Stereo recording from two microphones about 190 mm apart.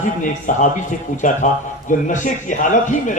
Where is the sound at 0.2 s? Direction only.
40° left (ahead or behind).